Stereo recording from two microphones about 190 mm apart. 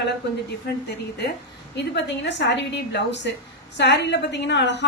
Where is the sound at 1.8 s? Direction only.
65° left (ahead or behind).